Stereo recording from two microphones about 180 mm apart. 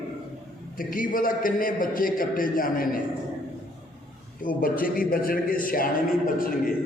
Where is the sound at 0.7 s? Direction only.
50° left (ahead or behind).